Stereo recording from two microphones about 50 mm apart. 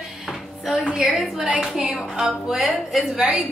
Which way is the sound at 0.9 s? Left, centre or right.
Centre.